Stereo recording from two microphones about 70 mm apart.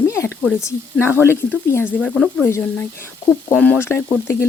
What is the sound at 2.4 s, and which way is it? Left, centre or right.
Speech, left.